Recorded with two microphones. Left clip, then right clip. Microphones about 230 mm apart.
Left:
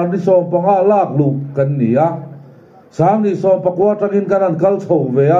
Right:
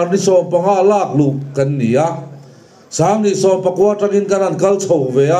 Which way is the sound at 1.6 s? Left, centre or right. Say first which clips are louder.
Left 1 dB; right.